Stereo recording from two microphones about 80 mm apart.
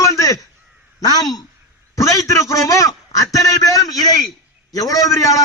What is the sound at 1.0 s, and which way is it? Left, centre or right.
Speech, left.